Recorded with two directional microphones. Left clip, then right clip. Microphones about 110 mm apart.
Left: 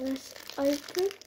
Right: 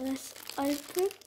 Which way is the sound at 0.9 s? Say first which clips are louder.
Left 1 dB; 30° right (ahead or behind).